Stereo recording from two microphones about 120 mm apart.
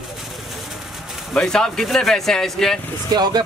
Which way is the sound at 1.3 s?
5° left (ahead or behind).